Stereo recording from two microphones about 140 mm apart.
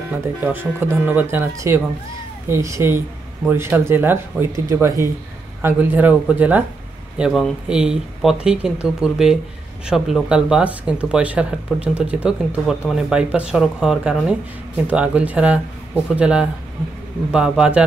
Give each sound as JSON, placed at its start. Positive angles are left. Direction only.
{"t": 0.4, "sound": "speech", "side_deg": -15}